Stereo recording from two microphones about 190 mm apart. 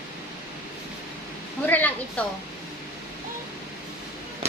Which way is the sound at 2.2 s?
5° left (ahead or behind).